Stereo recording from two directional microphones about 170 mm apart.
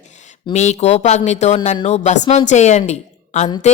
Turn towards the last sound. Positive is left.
turn(degrees=45)  # may be behind; listen again after turning